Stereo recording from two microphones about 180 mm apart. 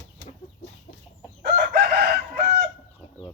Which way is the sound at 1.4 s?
60° right (ahead or behind).